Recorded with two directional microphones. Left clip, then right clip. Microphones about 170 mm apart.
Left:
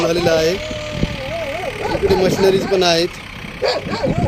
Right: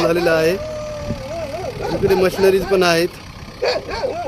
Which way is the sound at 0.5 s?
35° left (ahead or behind).